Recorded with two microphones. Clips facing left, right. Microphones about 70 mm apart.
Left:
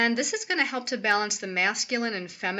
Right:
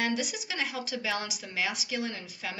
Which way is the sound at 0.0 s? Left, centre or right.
Left.